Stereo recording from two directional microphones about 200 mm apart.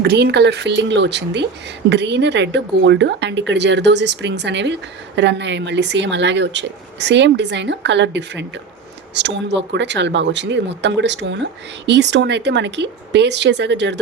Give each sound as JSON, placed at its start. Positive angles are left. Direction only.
{"t": 0.0, "sound": "a woman's voice", "side_deg": -55}